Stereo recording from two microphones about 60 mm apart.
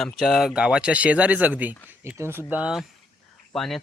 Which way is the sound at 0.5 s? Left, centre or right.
Centre.